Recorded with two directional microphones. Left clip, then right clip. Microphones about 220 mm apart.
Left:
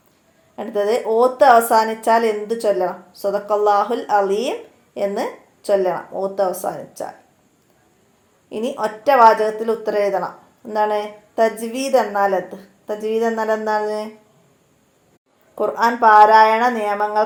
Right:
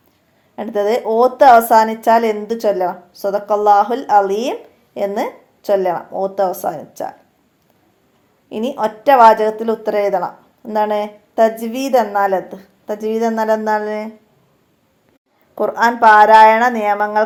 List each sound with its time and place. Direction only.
0.5 s a woman's voice: 30° right (ahead or behind)
8.4 s a woman's voice: 30° right (ahead or behind)
15.5 s a woman's voice: 25° right (ahead or behind)